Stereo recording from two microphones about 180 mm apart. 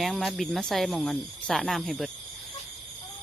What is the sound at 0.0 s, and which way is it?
Speech, centre (ahead or behind).